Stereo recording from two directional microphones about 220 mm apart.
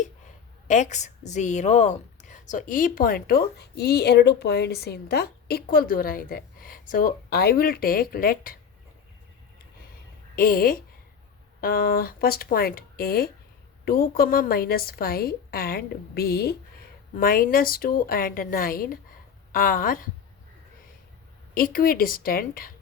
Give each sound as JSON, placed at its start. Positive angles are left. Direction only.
{"t": 0.7, "sound": "a woman's voice", "side_deg": 35}
{"t": 10.3, "sound": "a woman's voice", "side_deg": 40}
{"t": 21.5, "sound": "a woman's voice", "side_deg": 40}